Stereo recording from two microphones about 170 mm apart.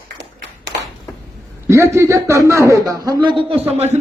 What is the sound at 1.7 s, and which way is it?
A man's voice, 15° right (ahead or behind).